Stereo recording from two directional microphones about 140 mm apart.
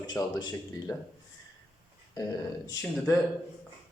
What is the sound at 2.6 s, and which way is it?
Speech, 30° left (ahead or behind).